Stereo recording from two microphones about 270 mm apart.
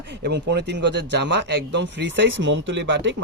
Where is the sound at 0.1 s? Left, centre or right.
Right.